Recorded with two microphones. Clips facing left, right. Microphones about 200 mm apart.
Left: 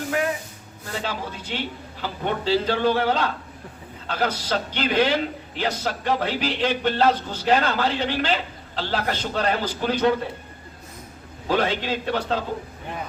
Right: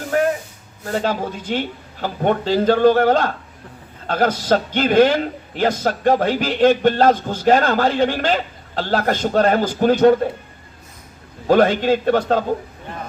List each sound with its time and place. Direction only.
0.1 s a sound: 40° right (ahead or behind)
0.9 s a man's voice: 45° right (ahead or behind)
11.4 s a man's voice: 45° right (ahead or behind)